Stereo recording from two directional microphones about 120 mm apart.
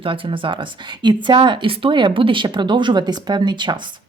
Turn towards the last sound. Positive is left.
turn(degrees=-40)  # may be behind; listen again after turning